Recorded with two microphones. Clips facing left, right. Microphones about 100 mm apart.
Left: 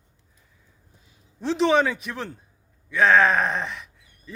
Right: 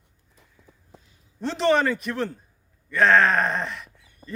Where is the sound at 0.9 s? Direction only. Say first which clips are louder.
Right 11 dB; 90° right.